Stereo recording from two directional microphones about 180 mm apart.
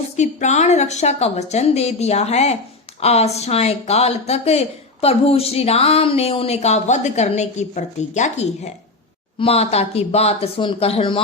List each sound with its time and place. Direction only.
0.2 s speech: 40° left (ahead or behind)